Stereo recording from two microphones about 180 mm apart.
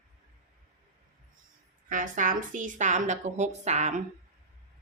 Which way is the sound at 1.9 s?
45° right (ahead or behind).